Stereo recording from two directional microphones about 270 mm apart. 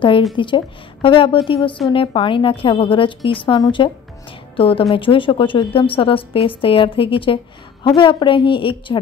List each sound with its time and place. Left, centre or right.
0.4 s a woman's voice: centre